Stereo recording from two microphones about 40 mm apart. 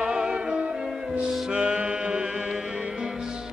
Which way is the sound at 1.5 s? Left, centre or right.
Right.